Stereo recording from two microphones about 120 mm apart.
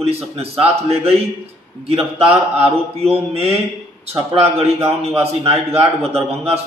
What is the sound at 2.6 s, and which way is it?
A man's voice, 60° right (ahead or behind).